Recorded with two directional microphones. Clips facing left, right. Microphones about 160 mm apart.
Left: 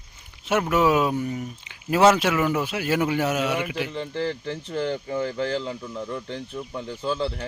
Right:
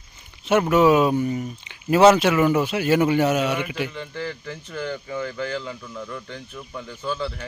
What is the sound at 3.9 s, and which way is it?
Speech, 30° left (ahead or behind).